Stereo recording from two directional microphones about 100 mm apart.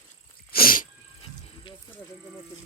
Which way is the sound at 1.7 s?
60° left (ahead or behind).